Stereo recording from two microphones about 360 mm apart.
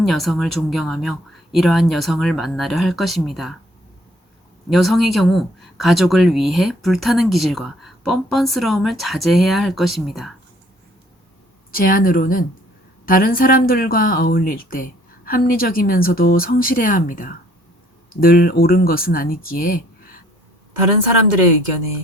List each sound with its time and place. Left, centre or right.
0.0 s speech: centre
4.7 s speech: centre
11.7 s speech: left